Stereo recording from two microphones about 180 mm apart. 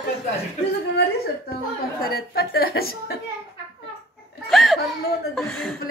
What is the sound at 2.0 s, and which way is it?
A woman's voice, 60° left (ahead or behind).